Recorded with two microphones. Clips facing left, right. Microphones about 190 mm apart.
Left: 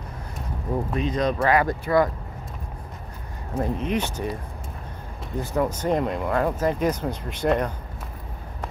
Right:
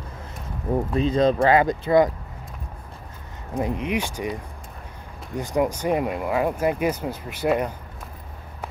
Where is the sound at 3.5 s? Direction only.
15° right (ahead or behind).